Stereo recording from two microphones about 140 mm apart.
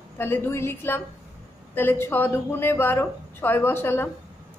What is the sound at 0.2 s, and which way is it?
A woman's voice, 15° left (ahead or behind).